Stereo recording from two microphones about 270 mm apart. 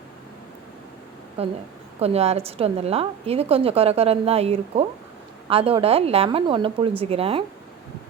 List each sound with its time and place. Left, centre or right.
1.4 s a woman's voice: right